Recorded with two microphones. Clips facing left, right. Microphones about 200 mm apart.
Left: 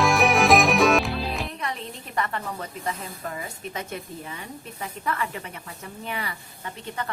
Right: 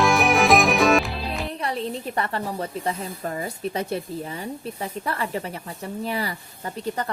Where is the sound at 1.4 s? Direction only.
35° right (ahead or behind).